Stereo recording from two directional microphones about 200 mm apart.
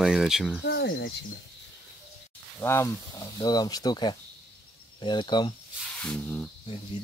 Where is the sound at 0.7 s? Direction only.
55° left (ahead or behind).